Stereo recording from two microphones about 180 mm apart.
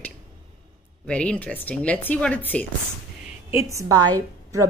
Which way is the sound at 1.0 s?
5° left (ahead or behind).